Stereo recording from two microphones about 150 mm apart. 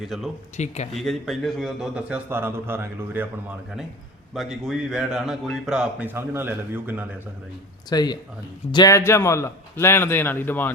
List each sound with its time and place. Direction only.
0.0 s speech: centre (ahead or behind)
0.5 s speech: 50° left (ahead or behind)
0.9 s a man's voice: centre (ahead or behind)
4.4 s speech: 5° right (ahead or behind)
7.9 s a man's voice: 25° left (ahead or behind)